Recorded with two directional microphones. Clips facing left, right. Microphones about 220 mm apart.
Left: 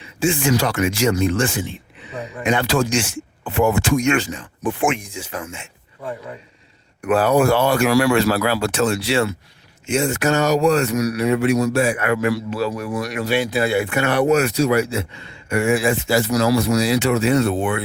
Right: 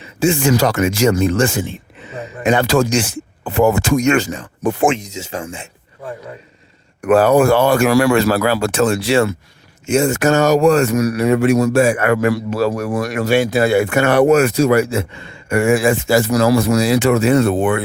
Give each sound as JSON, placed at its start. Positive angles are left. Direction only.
{"t": 0.2, "sound": "speech", "side_deg": -40}
{"t": 4.9, "sound": "speech", "side_deg": -20}
{"t": 7.1, "sound": "speech", "side_deg": -45}